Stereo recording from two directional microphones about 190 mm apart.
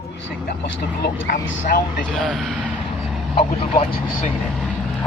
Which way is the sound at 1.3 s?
50° left (ahead or behind).